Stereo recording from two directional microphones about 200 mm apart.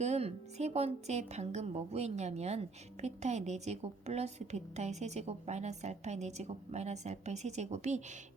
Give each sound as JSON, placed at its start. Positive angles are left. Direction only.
{"t": 0.0, "sound": "a woman's voice", "side_deg": -30}